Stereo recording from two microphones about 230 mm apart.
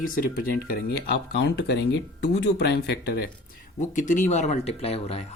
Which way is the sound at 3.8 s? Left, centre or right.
Left.